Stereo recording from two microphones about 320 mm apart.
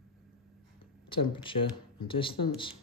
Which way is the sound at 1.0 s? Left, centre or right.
Centre.